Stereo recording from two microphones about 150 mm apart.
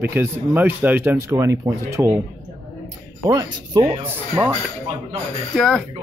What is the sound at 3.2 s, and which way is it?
Speech, 25° right (ahead or behind).